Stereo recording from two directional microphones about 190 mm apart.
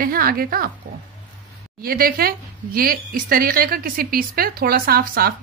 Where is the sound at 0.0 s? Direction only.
50° right (ahead or behind).